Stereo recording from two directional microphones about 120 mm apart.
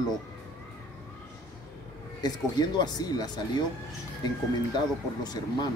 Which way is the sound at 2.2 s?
35° left (ahead or behind).